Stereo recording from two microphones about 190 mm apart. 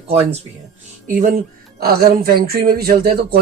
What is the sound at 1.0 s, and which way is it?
Speech, 45° right (ahead or behind).